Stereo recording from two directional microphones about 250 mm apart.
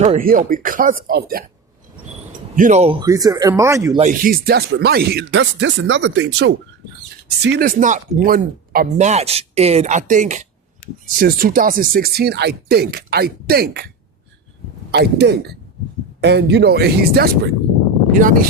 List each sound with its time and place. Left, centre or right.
0.0 s speech: right
2.6 s speech: right
3.1 s speech: centre
4.0 s speech: right
14.9 s speech: right